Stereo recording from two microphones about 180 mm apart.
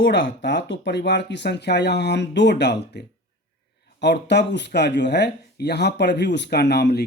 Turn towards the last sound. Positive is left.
turn(degrees=65)  # may be behind; listen again after turning